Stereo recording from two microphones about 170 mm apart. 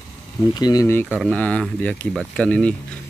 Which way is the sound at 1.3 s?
5° left (ahead or behind).